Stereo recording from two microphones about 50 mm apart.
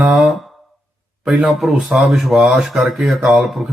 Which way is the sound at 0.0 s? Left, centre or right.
Right.